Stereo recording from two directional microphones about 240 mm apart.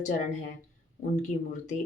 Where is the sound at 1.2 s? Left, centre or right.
Left.